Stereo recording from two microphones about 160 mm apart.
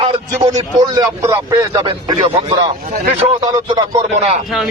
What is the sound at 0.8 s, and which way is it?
A man's voice, 25° right (ahead or behind).